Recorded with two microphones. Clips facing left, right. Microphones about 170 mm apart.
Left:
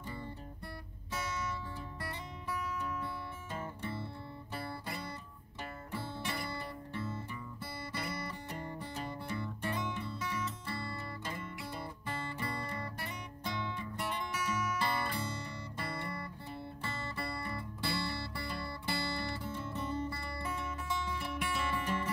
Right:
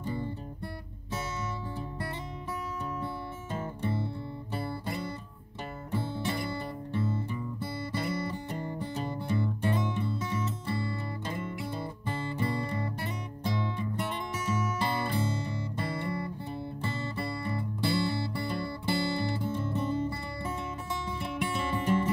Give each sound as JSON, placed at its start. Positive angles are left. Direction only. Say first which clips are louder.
{"t": 3.5, "sound": "music", "louder": "right 8 dB", "side_deg": -25}
{"t": 7.9, "sound": "music", "louder": "right 8 dB", "side_deg": -25}